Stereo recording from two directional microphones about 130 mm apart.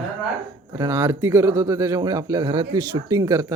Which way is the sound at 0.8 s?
20° right (ahead or behind).